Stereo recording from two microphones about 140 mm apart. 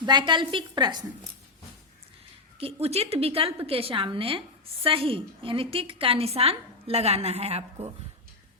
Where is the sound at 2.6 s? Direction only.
45° right (ahead or behind).